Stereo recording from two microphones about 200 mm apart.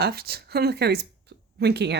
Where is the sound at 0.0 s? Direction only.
50° right (ahead or behind).